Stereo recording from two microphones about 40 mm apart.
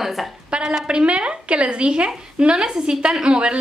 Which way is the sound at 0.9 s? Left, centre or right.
Right.